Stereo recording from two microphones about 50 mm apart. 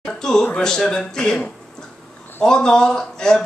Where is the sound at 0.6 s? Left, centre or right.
Centre.